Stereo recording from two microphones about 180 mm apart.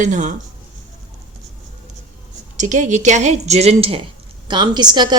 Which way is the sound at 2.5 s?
45° right (ahead or behind).